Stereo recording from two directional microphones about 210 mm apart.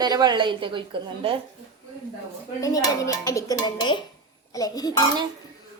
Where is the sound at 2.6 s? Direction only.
15° left (ahead or behind).